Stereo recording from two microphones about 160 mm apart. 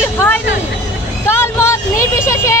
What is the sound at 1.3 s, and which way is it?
Speech, 15° left (ahead or behind).